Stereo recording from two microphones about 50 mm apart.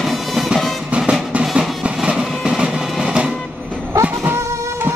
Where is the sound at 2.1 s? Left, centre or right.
Centre.